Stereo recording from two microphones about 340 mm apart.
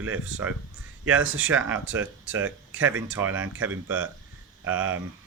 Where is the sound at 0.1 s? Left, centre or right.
Centre.